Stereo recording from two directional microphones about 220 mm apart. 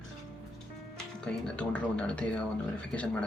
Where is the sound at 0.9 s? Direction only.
5° left (ahead or behind).